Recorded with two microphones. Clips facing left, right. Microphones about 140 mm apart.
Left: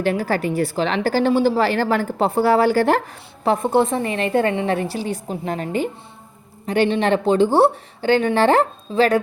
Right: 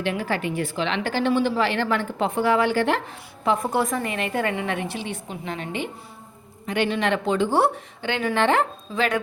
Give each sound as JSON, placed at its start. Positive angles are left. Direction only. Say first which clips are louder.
{"t": 0.0, "sound": "a woman's voice", "louder": "left 5 dB", "side_deg": 40}